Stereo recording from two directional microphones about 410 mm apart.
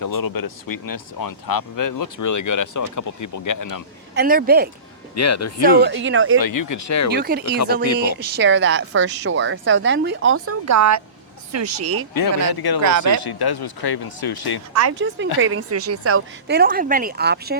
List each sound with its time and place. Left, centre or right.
0.0 s speech: left
4.1 s speech: right
5.1 s speech: left
5.8 s speech: right
6.4 s speech: left
7.1 s speech: right
12.1 s speech: left
12.8 s speech: right
13.2 s speech: left
14.7 s speech: right
14.9 s speech: right